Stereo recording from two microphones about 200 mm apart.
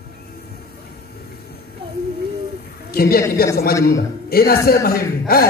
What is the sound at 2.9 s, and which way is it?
A woman's voice, 50° left (ahead or behind).